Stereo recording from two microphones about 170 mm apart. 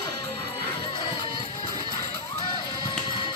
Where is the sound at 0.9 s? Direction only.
30° left (ahead or behind).